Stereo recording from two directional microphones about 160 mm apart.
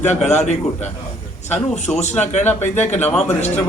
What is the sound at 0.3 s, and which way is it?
Speech, 45° left (ahead or behind).